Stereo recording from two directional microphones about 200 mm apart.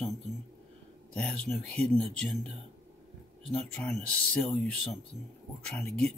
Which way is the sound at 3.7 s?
5° left (ahead or behind).